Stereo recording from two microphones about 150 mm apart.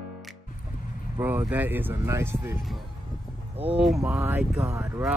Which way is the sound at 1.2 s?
15° right (ahead or behind).